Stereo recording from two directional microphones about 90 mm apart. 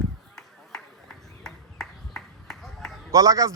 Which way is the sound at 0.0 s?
Centre (ahead or behind).